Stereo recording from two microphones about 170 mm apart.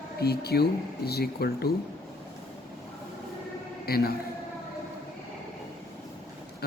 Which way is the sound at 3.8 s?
65° left (ahead or behind).